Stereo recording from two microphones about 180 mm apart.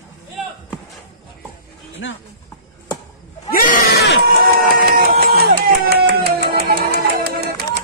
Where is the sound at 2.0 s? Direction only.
90° left.